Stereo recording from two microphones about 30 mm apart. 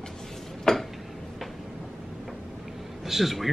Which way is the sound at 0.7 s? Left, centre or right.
Centre.